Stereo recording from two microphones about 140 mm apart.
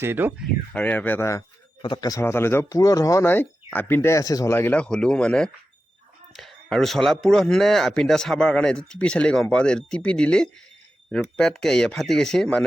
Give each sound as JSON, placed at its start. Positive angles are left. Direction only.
{"t": 0.0, "sound": "speech", "side_deg": -15}
{"t": 0.7, "sound": "speech", "side_deg": 10}
{"t": 1.8, "sound": "speech", "side_deg": 30}